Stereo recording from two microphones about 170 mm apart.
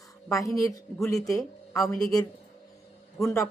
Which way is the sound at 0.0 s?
20° left (ahead or behind).